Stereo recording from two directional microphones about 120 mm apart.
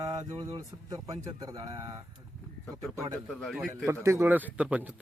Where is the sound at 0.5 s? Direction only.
30° right (ahead or behind).